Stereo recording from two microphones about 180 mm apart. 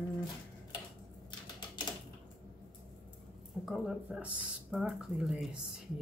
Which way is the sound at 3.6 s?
5° right (ahead or behind).